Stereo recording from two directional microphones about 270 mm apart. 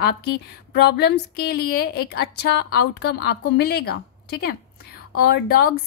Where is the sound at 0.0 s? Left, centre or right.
Left.